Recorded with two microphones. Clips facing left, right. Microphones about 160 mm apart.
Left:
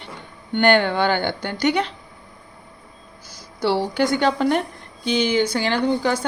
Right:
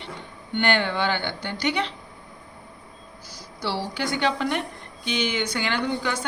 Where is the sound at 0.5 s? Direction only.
45° left (ahead or behind).